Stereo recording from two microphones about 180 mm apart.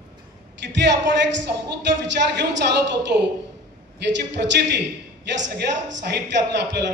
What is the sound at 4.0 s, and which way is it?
Speech, 70° right (ahead or behind).